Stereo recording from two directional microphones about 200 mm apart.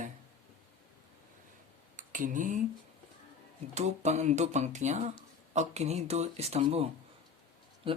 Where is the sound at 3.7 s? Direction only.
35° right (ahead or behind).